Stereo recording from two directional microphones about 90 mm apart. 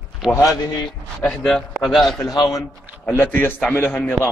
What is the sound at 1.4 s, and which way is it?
Speech, 5° left (ahead or behind).